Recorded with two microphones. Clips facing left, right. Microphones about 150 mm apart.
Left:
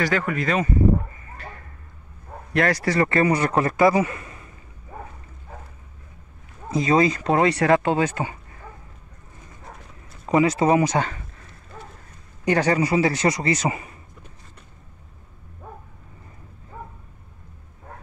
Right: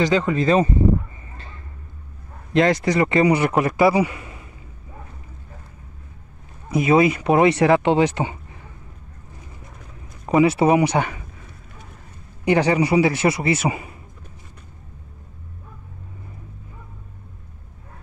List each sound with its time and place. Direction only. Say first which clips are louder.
0.0 s speech: right 5 dB; 20° right (ahead or behind)
1.3 s a sound: left 3 dB; 25° right (ahead or behind)
2.5 s a man's voice: right 4 dB; 20° right (ahead or behind)
6.9 s a man's voice: right 3 dB; 10° right (ahead or behind)
10.2 s a man's voice: right 3 dB; 15° right (ahead or behind)
12.4 s a man's voice: right 2 dB; 15° right (ahead or behind)